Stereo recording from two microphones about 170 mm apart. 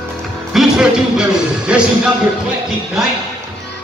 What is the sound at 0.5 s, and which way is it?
Speech, 5° right (ahead or behind).